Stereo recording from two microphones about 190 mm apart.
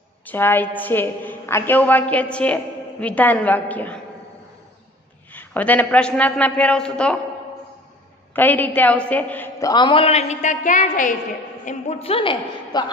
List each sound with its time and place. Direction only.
0.3 s a woman's voice: 10° left (ahead or behind)
5.3 s a woman's voice: 10° left (ahead or behind)
8.3 s a woman's voice: 10° left (ahead or behind); by 12.9 s 25° left (ahead or behind)